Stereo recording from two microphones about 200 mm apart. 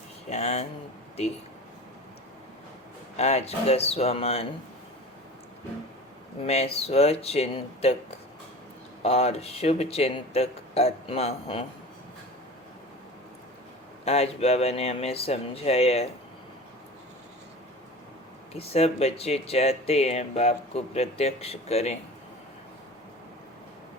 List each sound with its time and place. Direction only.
0.3 s speech: 30° left (ahead or behind)
3.2 s speech: 30° left (ahead or behind)
6.4 s speech: 30° left (ahead or behind)
9.0 s speech: 30° left (ahead or behind)
14.0 s speech: 30° left (ahead or behind)
18.5 s speech: 30° left (ahead or behind)